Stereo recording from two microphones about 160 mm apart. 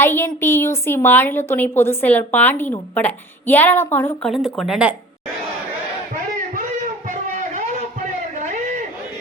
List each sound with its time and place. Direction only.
0.0 s a woman's voice: 15° left (ahead or behind)
4.3 s speech: centre (ahead or behind)
7.1 s a sound: 50° right (ahead or behind)
8.4 s chatter: 50° right (ahead or behind)